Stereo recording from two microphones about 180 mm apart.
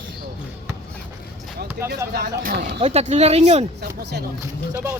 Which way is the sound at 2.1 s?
65° right (ahead or behind).